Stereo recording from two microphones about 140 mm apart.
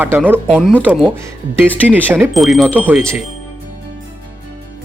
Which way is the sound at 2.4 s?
Centre (ahead or behind).